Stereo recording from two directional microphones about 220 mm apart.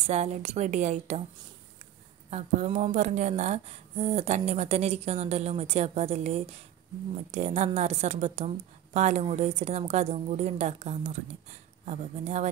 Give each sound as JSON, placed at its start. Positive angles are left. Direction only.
{"t": 0.0, "sound": "a woman's voice", "side_deg": -30}
{"t": 2.3, "sound": "a woman's voice", "side_deg": -30}